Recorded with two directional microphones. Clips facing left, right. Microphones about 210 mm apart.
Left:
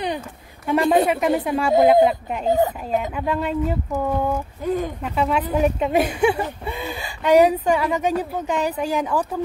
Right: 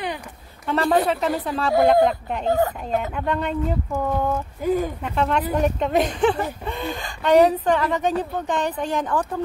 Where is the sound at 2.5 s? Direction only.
20° left (ahead or behind).